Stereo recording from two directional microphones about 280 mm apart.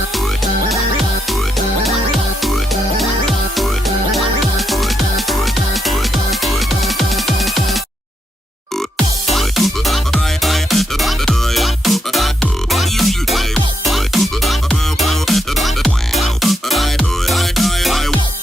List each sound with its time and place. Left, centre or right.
1.3 s music: centre
3.0 s music: centre
9.3 s music: centre